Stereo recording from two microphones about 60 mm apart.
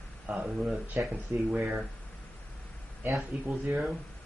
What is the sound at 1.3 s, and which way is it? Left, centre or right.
Speech, right.